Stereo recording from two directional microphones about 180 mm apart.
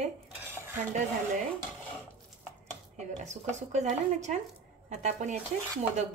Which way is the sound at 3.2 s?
40° right (ahead or behind).